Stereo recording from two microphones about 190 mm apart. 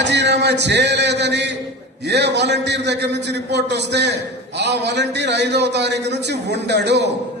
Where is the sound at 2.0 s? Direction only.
65° right (ahead or behind).